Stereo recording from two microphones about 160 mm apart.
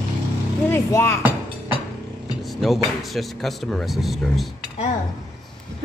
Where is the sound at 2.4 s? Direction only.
Centre (ahead or behind).